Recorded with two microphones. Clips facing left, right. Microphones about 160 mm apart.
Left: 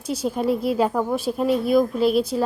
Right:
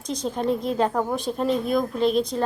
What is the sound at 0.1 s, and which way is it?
A woman's voice, 5° left (ahead or behind).